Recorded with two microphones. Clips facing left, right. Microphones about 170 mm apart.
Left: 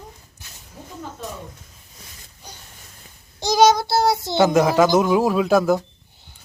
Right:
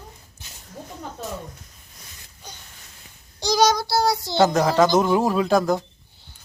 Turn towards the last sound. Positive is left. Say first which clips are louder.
# left 2 dB
turn(degrees=5)  # may be behind; listen again after turning